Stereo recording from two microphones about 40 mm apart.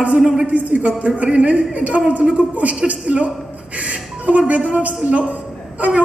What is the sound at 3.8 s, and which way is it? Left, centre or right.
Music, right.